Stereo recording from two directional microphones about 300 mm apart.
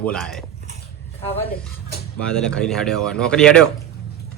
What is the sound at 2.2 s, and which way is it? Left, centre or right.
Speech, centre.